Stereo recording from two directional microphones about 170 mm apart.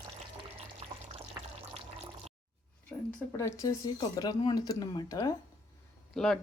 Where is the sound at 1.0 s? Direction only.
40° right (ahead or behind).